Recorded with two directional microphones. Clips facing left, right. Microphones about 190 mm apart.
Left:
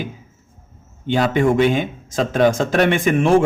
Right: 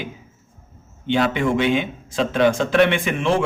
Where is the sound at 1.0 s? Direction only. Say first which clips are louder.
Left 3 dB; 40° left (ahead or behind).